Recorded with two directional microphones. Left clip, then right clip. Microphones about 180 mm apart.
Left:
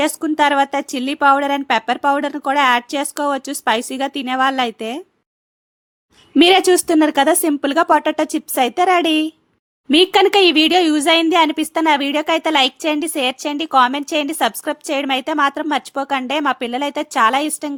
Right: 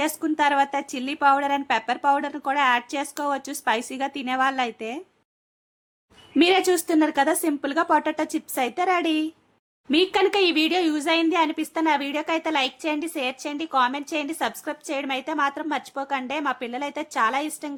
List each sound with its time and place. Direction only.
0.0 s a woman's voice: 35° left (ahead or behind)
6.3 s a woman's voice: 40° left (ahead or behind)